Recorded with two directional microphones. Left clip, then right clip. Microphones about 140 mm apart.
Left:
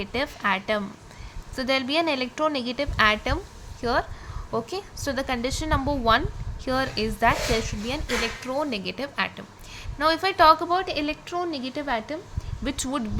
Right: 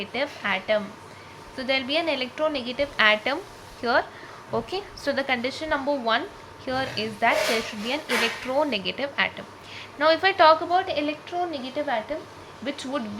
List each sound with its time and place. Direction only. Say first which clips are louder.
0.0 s a woman's voice: left 1 dB; 50° left (ahead or behind)